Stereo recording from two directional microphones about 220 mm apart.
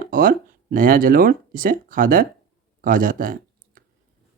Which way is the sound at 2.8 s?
40° right (ahead or behind).